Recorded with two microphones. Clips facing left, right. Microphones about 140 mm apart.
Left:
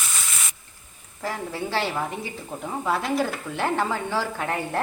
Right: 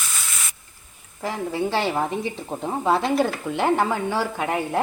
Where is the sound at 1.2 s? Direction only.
15° right (ahead or behind).